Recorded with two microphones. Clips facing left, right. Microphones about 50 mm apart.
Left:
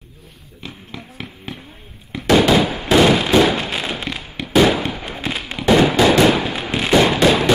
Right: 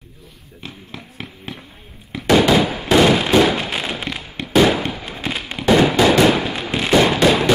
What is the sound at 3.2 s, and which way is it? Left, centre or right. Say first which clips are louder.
Fireworks: even; centre.